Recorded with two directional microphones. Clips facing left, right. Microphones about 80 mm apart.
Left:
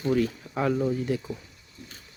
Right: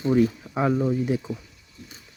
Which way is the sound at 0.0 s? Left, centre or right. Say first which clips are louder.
Right 4 dB; centre.